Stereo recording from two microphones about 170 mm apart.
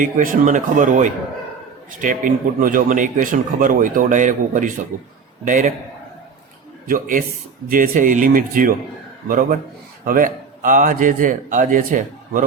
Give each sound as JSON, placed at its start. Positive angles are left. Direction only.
{"t": 0.0, "sound": "speech", "side_deg": -50}
{"t": 6.8, "sound": "a man's voice", "side_deg": -55}